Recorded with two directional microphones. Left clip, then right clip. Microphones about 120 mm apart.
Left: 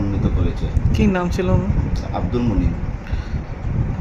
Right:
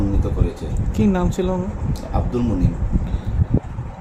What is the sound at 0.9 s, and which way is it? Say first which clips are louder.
Speech: left 1 dB; 15° right (ahead or behind).